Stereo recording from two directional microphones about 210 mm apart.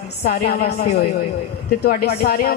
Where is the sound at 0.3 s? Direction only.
45° left (ahead or behind).